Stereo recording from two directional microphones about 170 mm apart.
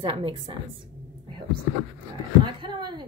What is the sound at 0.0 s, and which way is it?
Speech, 30° right (ahead or behind).